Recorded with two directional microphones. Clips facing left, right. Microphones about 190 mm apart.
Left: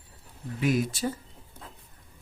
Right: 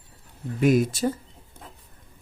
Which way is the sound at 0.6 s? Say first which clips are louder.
Right 6 dB; 45° right (ahead or behind).